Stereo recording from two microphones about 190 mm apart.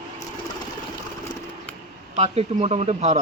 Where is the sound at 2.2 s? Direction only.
35° right (ahead or behind).